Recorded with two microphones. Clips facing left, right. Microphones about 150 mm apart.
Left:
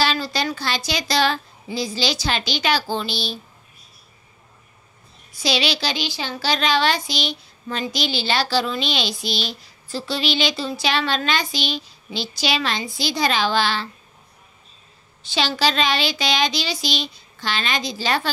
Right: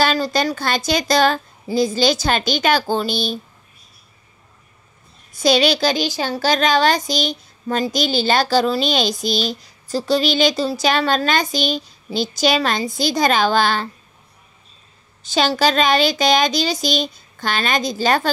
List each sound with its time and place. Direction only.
0.0 s speech: 45° right (ahead or behind)
5.4 s speech: 50° right (ahead or behind)
15.2 s speech: 45° right (ahead or behind)